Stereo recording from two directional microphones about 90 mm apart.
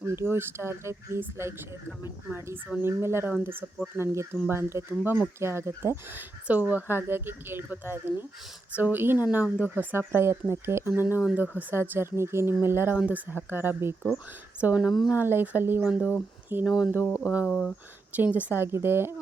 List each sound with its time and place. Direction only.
0.0 s speech: 30° right (ahead or behind)
14.6 s speech: 15° right (ahead or behind)
15.8 s speech: 10° right (ahead or behind)
17.0 s a sound: 25° left (ahead or behind)
17.4 s speech: 15° left (ahead or behind)
18.2 s speech: 15° right (ahead or behind)